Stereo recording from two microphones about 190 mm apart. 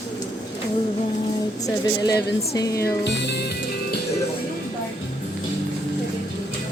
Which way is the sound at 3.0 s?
65° left (ahead or behind).